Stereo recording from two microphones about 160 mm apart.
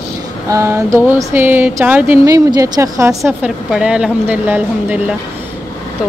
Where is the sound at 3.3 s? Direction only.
5° right (ahead or behind).